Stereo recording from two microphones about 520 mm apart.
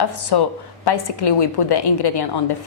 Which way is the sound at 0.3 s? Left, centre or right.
Left.